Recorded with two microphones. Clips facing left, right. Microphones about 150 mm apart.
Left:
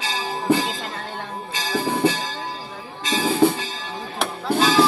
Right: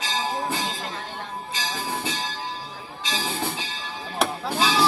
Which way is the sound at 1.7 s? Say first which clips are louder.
Left 12 dB; 60° left (ahead or behind).